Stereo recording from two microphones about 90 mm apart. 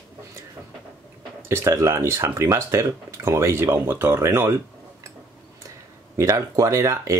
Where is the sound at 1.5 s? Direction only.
30° right (ahead or behind).